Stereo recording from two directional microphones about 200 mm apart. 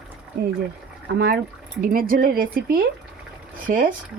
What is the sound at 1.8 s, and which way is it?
Speech, 45° right (ahead or behind).